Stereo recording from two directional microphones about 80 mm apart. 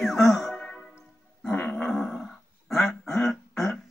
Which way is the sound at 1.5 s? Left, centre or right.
Centre.